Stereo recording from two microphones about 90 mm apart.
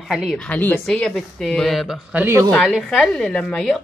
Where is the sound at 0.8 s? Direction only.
5° left (ahead or behind).